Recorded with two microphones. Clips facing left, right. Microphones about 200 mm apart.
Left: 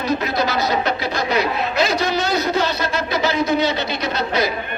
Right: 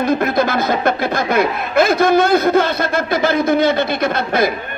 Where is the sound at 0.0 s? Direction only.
50° right (ahead or behind).